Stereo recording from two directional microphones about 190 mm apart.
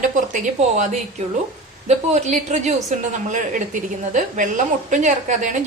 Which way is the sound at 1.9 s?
35° right (ahead or behind).